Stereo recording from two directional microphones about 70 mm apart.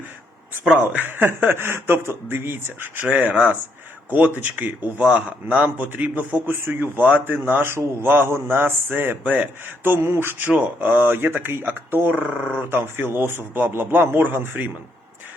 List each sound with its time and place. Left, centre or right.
0.9 s a man's voice: right
3.0 s a man's voice: right
9.8 s a man's voice: right